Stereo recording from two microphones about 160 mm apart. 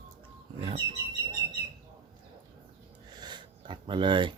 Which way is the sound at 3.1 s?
25° right (ahead or behind).